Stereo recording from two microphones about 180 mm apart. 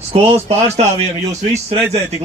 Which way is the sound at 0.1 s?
35° right (ahead or behind).